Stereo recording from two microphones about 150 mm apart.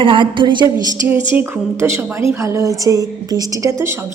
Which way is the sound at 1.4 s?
15° right (ahead or behind).